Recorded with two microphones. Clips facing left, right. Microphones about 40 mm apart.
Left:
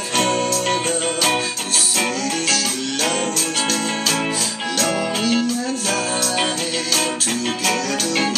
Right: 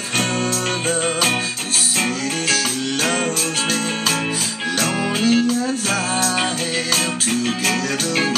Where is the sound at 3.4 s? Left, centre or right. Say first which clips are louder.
Even; centre.